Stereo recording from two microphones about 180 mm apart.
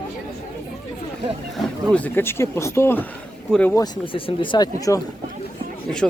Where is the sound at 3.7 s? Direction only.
20° left (ahead or behind).